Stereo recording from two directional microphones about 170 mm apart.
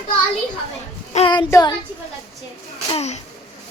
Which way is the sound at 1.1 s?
30° left (ahead or behind).